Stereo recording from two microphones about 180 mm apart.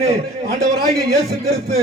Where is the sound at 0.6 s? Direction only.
60° right (ahead or behind).